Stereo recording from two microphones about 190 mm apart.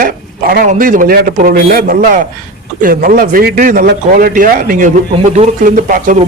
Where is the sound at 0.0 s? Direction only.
50° right (ahead or behind).